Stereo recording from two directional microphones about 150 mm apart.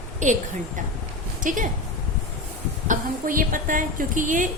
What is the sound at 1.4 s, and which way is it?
Speech, 60° right (ahead or behind).